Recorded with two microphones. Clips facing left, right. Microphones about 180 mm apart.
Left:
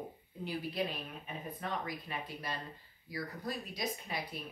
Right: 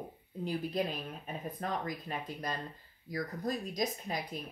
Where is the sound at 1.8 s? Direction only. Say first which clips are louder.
Right 3 dB; 45° right (ahead or behind).